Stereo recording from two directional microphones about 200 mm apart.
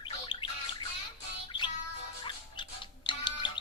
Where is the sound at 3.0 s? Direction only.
25° left (ahead or behind).